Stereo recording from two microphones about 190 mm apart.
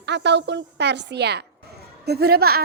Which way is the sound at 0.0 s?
65° right (ahead or behind).